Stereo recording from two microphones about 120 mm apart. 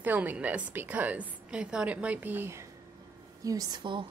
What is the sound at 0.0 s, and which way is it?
A woman's voice, 15° right (ahead or behind).